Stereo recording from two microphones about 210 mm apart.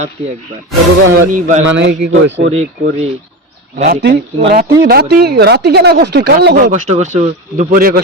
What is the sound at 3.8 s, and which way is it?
Speech, 45° right (ahead or behind).